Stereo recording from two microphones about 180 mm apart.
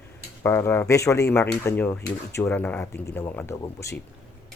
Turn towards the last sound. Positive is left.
turn(degrees=15)  # may be behind; listen again after turning